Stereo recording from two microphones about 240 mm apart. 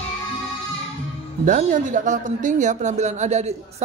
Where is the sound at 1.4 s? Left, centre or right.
Right.